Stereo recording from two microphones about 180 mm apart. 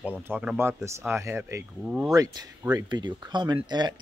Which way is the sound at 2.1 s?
20° right (ahead or behind).